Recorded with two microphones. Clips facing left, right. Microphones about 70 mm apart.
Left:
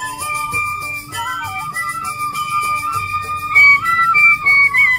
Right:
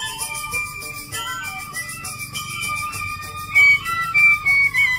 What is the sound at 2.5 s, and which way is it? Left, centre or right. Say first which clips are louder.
Music: left 8 dB; left.